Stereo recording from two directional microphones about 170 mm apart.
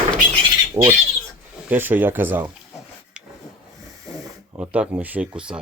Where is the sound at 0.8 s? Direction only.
35° right (ahead or behind).